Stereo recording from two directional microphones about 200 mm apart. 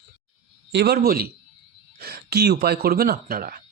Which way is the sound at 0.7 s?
55° right (ahead or behind).